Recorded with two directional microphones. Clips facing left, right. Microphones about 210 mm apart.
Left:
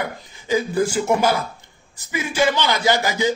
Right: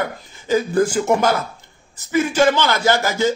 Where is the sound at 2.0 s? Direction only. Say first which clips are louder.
Right 5 dB; 10° left (ahead or behind).